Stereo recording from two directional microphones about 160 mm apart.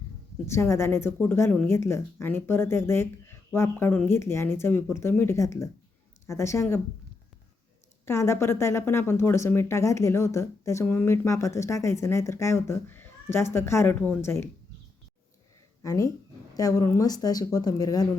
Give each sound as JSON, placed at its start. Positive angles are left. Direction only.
{"t": 0.4, "sound": "a woman's voice", "side_deg": 15}
{"t": 8.0, "sound": "a woman's voice", "side_deg": 15}
{"t": 15.8, "sound": "speech", "side_deg": 20}